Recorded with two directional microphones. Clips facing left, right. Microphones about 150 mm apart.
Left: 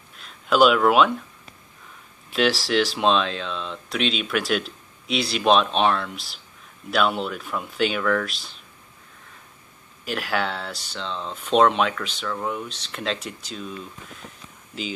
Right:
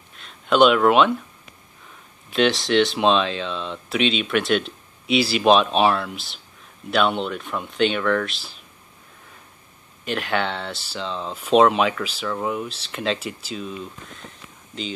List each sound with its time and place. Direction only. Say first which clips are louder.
0.2 s speech: right 1 dB; centre (ahead or behind)
2.3 s speech: right 3 dB; 5° left (ahead or behind)
10.0 s speech: right 2 dB; 5° left (ahead or behind)